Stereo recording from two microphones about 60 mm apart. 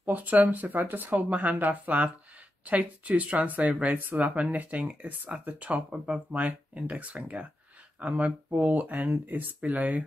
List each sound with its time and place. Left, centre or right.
0.0 s speech: right